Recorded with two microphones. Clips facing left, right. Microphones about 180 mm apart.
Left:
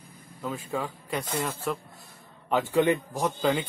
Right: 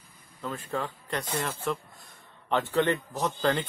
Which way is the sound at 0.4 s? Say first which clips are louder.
Left 1 dB; 5° left (ahead or behind).